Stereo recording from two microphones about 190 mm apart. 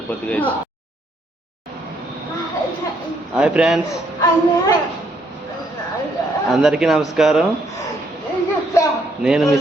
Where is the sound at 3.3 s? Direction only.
5° right (ahead or behind).